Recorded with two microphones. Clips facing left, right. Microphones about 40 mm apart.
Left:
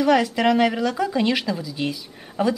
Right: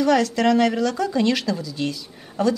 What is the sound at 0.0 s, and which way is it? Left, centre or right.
A woman's voice, centre.